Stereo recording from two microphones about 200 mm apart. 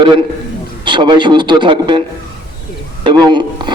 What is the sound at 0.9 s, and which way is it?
Speech, 25° right (ahead or behind).